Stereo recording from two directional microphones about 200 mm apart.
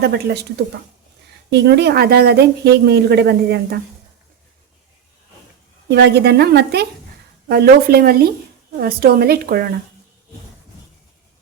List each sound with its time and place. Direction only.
0.0 s a woman's voice: 55° right (ahead or behind)
1.5 s a woman's voice: 55° right (ahead or behind)
5.9 s a woman's voice: 55° right (ahead or behind)